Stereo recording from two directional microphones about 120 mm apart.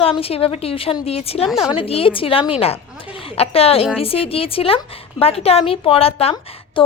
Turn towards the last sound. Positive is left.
turn(degrees=45)  # may be behind; listen again after turning